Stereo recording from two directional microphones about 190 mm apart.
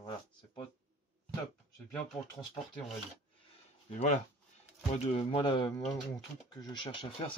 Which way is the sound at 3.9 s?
35° left (ahead or behind).